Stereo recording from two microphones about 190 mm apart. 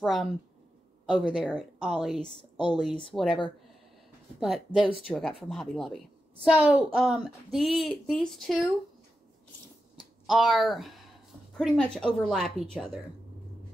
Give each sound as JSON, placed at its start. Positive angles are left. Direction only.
{"t": 0.0, "sound": "speech", "side_deg": 0}
{"t": 2.2, "sound": "speech", "side_deg": 25}
{"t": 3.1, "sound": "speech", "side_deg": 5}
{"t": 4.4, "sound": "speech", "side_deg": 0}
{"t": 10.2, "sound": "speech", "side_deg": 0}